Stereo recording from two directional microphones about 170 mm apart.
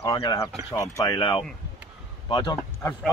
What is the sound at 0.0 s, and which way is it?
Speech, 25° left (ahead or behind).